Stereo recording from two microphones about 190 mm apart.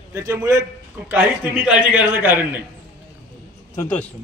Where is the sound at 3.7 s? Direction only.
15° left (ahead or behind).